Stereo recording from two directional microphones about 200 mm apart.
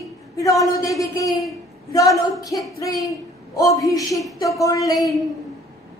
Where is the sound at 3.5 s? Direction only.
15° left (ahead or behind).